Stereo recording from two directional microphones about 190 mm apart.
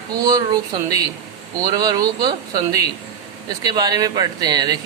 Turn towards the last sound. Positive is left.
turn(degrees=-20)  # may be behind; listen again after turning